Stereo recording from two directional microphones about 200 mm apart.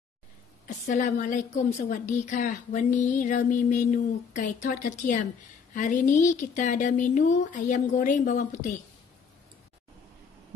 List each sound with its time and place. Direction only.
0.7 s a woman's voice: 40° left (ahead or behind)